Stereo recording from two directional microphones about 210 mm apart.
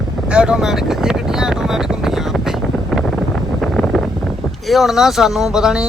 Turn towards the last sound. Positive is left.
turn(degrees=-5)  # may be behind; listen again after turning